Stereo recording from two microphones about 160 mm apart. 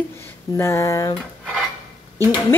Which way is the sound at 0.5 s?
15° left (ahead or behind).